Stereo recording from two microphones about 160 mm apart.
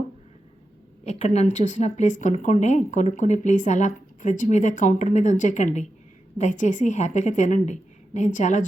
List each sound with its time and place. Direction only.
1.0 s speech: 45° left (ahead or behind)